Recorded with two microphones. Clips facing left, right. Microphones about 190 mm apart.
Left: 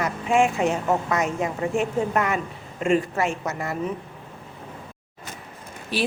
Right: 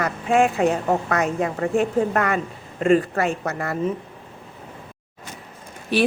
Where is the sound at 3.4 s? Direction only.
60° right (ahead or behind).